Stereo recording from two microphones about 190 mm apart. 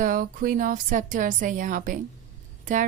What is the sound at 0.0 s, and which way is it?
Speech, 45° right (ahead or behind).